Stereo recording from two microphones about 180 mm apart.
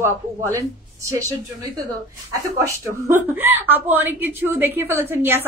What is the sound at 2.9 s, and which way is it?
A woman's voice, 15° right (ahead or behind).